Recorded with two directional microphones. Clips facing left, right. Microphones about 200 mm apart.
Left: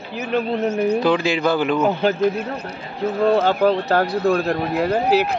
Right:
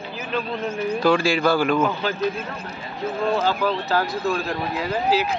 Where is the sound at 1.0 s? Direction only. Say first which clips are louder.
Left 1 dB; 20° left (ahead or behind).